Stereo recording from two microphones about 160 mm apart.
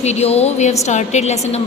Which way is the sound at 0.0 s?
45° left (ahead or behind).